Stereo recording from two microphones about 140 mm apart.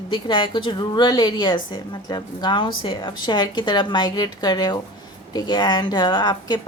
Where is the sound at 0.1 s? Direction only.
35° left (ahead or behind).